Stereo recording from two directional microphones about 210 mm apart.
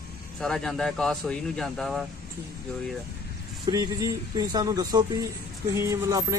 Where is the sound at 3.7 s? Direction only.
15° right (ahead or behind).